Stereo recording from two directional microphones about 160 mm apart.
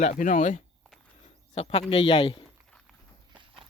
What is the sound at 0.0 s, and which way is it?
Speech, 50° left (ahead or behind).